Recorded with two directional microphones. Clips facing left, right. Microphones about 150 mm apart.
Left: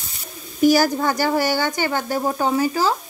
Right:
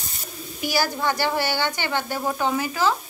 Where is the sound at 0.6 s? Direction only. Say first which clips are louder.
Left 9 dB; 45° left (ahead or behind).